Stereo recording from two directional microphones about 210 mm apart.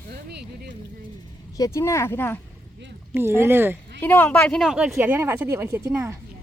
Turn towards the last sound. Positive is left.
turn(degrees=-15)  # may be behind; listen again after turning